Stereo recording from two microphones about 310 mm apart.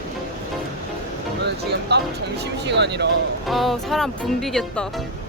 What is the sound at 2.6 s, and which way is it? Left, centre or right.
Speech, right.